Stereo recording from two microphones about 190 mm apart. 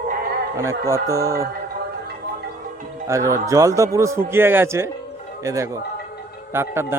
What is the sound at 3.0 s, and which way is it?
A man's voice, 15° right (ahead or behind).